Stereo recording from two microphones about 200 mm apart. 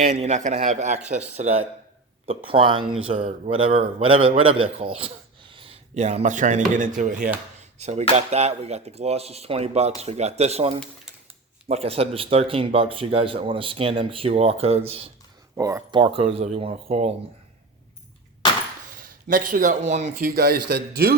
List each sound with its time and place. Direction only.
0.0 s a man's voice: 35° right (ahead or behind)
15.5 s a man's voice: 15° right (ahead or behind); by 17.2 s 30° right (ahead or behind)
18.9 s speech: 45° right (ahead or behind)
20.3 s a man's voice: 50° right (ahead or behind)